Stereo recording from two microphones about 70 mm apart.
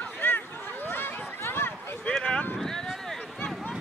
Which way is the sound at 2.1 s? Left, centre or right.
Centre.